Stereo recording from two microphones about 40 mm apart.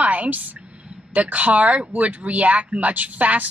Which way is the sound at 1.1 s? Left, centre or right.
Right.